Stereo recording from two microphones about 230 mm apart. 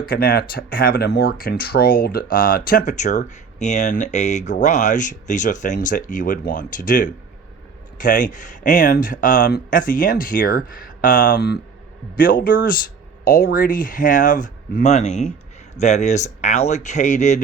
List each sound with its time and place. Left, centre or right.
0.0 s speech: left